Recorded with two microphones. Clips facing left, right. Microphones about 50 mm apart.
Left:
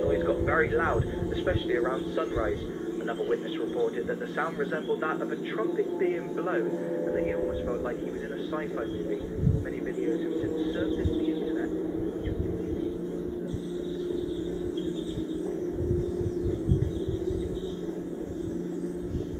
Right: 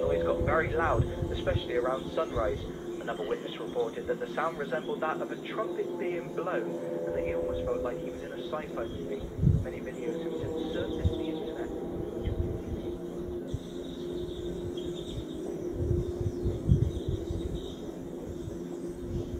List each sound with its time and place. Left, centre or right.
0.0 s speech: centre
5.6 s speech: centre
7.1 s speech: centre
10.6 s vehicle: centre